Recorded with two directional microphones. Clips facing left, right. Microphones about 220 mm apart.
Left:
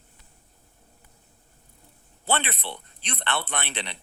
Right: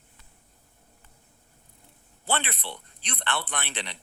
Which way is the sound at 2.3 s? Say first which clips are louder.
Left 2 dB; 25° left (ahead or behind).